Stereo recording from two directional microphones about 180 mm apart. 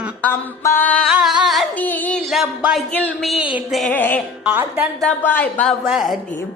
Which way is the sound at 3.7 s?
5° left (ahead or behind).